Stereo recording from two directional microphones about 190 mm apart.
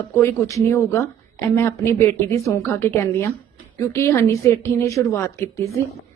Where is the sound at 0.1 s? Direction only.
15° left (ahead or behind).